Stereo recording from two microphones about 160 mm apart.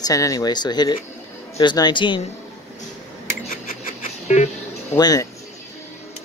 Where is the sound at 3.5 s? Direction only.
55° left (ahead or behind).